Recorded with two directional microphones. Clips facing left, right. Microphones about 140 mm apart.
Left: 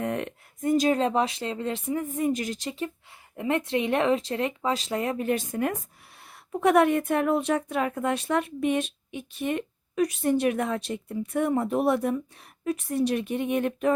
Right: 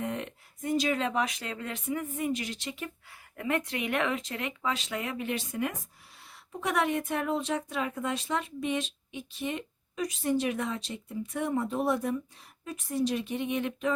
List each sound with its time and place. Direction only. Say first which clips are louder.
0.0 s speech: left 5 dB; 60° left (ahead or behind)